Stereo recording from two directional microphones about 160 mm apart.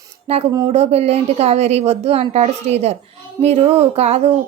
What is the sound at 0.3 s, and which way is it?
Speech, 40° right (ahead or behind).